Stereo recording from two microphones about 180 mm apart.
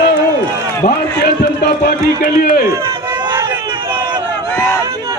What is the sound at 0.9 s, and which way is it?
A man's voice, 60° left (ahead or behind).